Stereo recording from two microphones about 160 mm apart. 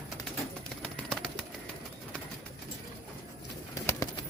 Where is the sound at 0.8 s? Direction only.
5° left (ahead or behind).